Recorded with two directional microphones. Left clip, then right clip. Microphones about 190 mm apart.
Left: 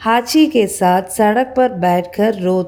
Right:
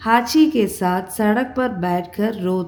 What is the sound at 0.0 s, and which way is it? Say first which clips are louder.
A woman's voice: left 2 dB; 35° left (ahead or behind).